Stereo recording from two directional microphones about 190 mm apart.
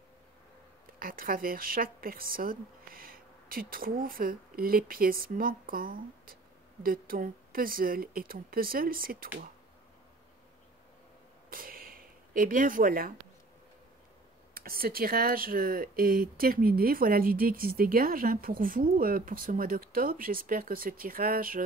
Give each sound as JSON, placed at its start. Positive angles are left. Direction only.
{"t": 0.9, "sound": "a woman's voice", "side_deg": -50}
{"t": 11.5, "sound": "a sound", "side_deg": -50}
{"t": 14.5, "sound": "speech", "side_deg": -50}